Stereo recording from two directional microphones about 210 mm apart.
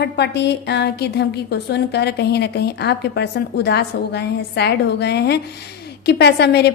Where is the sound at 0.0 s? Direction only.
55° left (ahead or behind).